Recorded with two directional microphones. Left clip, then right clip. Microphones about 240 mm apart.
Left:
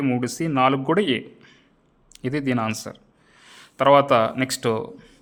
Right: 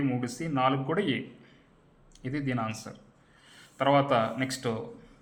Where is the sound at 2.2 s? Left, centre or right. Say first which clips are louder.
Left 8 dB; left.